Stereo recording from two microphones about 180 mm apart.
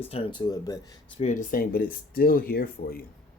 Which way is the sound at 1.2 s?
45° left (ahead or behind).